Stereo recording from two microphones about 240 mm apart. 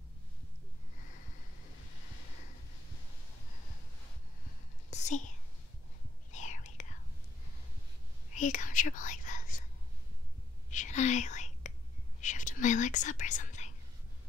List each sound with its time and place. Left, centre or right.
4.9 s whispering: left
6.3 s whispering: left
8.4 s whispering: left
10.7 s whispering: left